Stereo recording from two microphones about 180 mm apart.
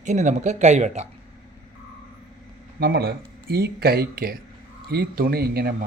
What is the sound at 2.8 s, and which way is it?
Speech, 60° right (ahead or behind).